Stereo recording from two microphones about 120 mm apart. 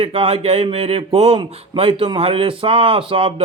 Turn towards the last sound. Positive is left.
turn(degrees=-45)  # may be behind; listen again after turning